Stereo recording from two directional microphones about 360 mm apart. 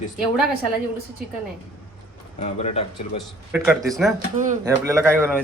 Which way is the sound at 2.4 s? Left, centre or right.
Centre.